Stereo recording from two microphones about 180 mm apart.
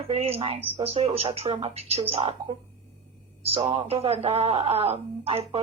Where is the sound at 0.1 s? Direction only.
35° right (ahead or behind).